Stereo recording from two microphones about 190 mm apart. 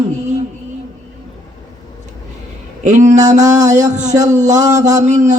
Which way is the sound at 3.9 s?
40° right (ahead or behind).